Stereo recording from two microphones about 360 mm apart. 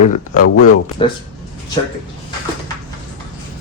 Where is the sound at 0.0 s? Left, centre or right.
Centre.